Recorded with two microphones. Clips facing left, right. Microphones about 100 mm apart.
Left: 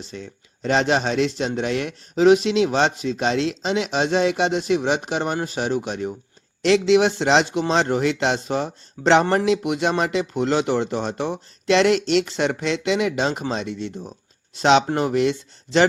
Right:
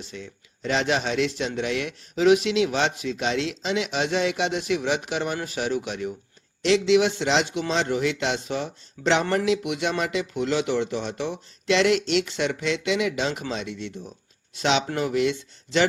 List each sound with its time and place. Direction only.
0.0 s speech: 35° left (ahead or behind)